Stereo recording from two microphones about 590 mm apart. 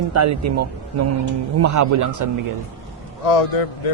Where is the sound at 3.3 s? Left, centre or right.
Left.